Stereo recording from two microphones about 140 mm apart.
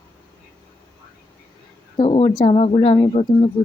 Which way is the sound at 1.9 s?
40° left (ahead or behind).